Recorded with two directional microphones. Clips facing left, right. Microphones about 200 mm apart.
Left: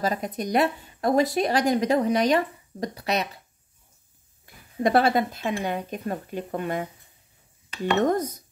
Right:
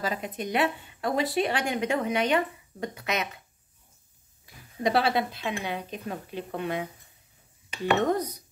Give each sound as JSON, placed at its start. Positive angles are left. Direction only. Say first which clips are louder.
{"t": 0.0, "sound": "speech", "louder": "left 4 dB", "side_deg": 40}
{"t": 4.5, "sound": "a sound", "louder": "even", "side_deg": 55}
{"t": 4.8, "sound": "speech", "louder": "left 4 dB", "side_deg": 50}
{"t": 8.0, "sound": "speech", "louder": "left 3 dB", "side_deg": 45}